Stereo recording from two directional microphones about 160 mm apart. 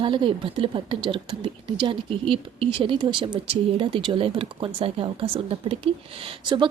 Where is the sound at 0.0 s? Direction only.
30° right (ahead or behind).